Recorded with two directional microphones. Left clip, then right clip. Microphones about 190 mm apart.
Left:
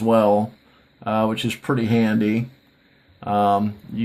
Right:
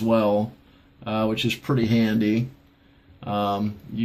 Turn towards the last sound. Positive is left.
turn(degrees=55)  # may be behind; listen again after turning